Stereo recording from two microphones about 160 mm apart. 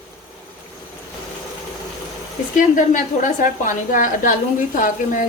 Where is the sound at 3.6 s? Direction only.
55° left (ahead or behind).